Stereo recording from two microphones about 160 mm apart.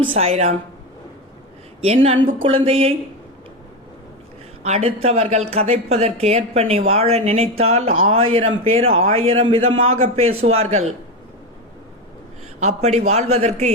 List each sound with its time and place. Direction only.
0.2 s speech: 40° right (ahead or behind)
1.8 s speech: 40° right (ahead or behind)
4.6 s speech: 40° right (ahead or behind)
12.5 s a man's voice: 45° right (ahead or behind)